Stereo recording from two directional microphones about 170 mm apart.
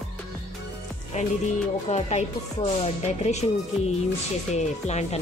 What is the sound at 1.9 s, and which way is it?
Music, 40° left (ahead or behind).